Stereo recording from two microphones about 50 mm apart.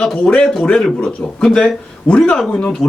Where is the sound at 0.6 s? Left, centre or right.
Centre.